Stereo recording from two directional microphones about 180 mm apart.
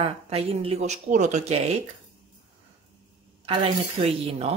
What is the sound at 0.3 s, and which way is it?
Speech, 35° right (ahead or behind).